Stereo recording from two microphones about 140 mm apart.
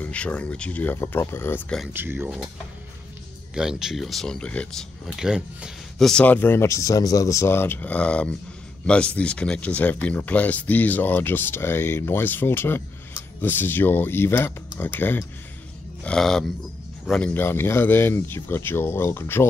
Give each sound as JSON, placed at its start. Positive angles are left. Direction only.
{"t": 0.0, "sound": "speech", "side_deg": 10}
{"t": 1.9, "sound": "speech", "side_deg": -15}
{"t": 3.5, "sound": "speech", "side_deg": -5}
{"t": 17.3, "sound": "speech", "side_deg": 15}